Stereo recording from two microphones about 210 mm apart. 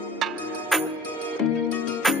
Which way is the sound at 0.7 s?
Centre (ahead or behind).